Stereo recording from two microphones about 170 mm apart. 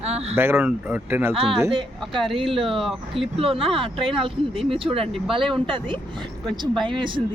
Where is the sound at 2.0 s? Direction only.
Centre (ahead or behind).